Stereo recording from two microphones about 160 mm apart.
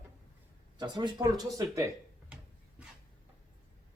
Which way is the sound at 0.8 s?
25° right (ahead or behind).